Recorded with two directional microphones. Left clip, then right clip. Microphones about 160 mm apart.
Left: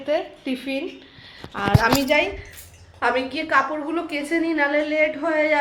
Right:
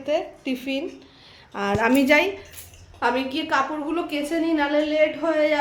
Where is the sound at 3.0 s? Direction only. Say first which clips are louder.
Left 1 dB; 10° right (ahead or behind).